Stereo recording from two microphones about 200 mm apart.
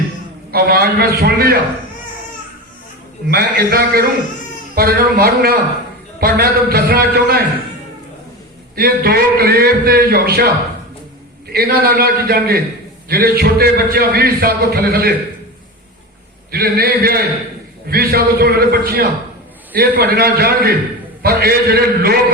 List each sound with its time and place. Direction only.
0.5 s a man's voice: 50° right (ahead or behind)
3.2 s a man's voice: 50° right (ahead or behind)
8.7 s a man's voice: 50° right (ahead or behind)
16.5 s a man's voice: 50° right (ahead or behind)